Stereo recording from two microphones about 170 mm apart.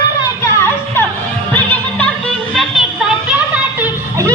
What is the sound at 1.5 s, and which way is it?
Music, 10° left (ahead or behind).